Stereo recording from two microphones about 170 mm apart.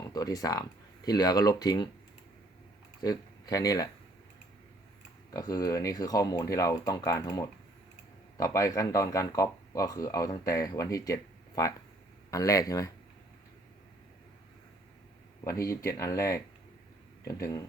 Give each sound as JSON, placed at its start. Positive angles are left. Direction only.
{"t": 0.1, "sound": "speech", "side_deg": 20}
{"t": 3.0, "sound": "speech", "side_deg": 20}
{"t": 5.3, "sound": "speech", "side_deg": 20}
{"t": 15.4, "sound": "speech", "side_deg": 15}